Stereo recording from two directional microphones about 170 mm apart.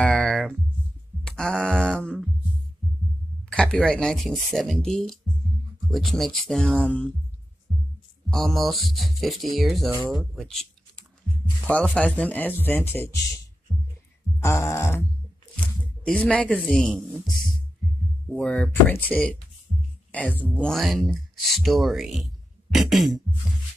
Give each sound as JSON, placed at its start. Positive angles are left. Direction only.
{"t": 0.0, "sound": "a sound", "side_deg": 5}
{"t": 3.5, "sound": "speech", "side_deg": 5}
{"t": 7.7, "sound": "music", "side_deg": 0}
{"t": 8.3, "sound": "speech", "side_deg": 0}
{"t": 14.4, "sound": "speech", "side_deg": 15}